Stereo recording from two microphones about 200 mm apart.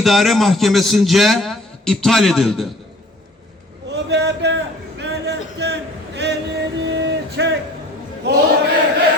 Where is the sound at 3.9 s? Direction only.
60° right (ahead or behind).